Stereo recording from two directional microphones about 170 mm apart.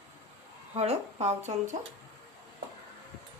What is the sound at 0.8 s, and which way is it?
Speech, 40° right (ahead or behind).